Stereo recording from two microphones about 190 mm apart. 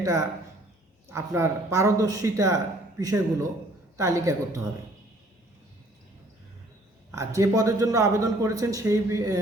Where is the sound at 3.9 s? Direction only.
15° right (ahead or behind).